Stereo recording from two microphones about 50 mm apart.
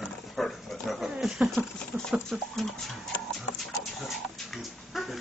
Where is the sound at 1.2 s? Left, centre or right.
Centre.